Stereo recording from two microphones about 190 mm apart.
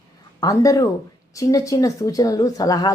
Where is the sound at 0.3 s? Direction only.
15° left (ahead or behind).